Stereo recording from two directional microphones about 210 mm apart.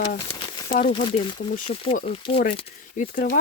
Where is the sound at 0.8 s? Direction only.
20° left (ahead or behind).